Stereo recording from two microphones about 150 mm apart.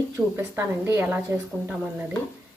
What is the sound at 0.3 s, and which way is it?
A woman's voice, 15° right (ahead or behind).